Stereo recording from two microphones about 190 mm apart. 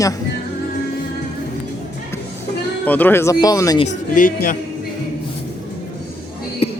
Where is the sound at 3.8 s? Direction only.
45° left (ahead or behind).